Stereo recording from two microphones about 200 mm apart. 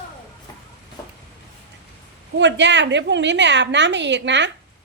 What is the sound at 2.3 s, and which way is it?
A woman's voice, 60° right (ahead or behind).